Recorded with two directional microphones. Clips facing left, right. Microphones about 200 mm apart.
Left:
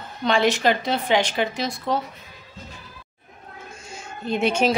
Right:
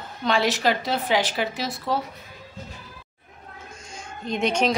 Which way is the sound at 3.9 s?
5° left (ahead or behind).